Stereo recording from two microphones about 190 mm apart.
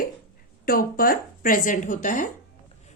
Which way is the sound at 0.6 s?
50° left (ahead or behind).